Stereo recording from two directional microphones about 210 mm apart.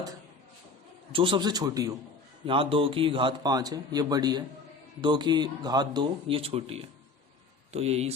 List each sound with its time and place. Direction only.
1.1 s a man's voice: 25° right (ahead or behind)